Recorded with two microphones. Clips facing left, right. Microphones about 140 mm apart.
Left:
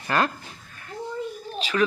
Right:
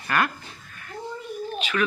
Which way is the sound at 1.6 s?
35° left (ahead or behind).